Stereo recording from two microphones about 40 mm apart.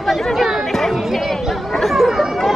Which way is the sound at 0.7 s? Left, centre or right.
Centre.